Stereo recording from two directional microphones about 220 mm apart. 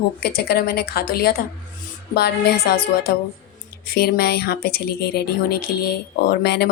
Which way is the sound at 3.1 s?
45° left (ahead or behind).